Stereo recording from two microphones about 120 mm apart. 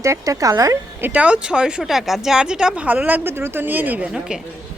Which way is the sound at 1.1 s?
10° right (ahead or behind).